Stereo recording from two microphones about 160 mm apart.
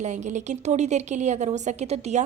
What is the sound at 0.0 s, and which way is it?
A woman's voice, 45° right (ahead or behind).